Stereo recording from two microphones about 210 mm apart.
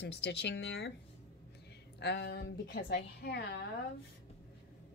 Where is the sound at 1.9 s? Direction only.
55° left (ahead or behind).